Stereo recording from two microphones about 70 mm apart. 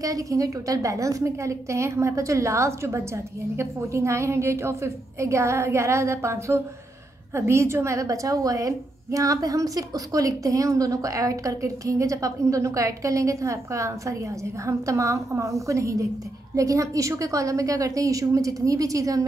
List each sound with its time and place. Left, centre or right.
0.0 s a woman's voice: right